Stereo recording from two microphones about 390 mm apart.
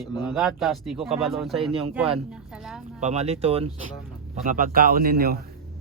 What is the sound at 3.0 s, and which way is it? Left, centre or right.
Speech, centre.